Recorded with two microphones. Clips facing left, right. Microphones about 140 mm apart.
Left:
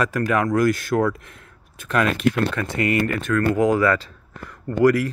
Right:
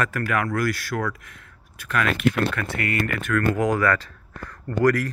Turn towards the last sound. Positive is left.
turn(degrees=25)  # may be behind; listen again after turning